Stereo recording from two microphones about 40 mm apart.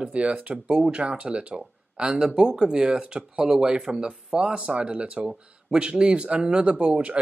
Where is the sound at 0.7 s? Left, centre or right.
Centre.